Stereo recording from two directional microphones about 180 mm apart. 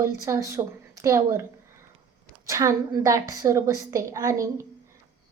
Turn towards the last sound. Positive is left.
turn(degrees=-15)  # may be behind; listen again after turning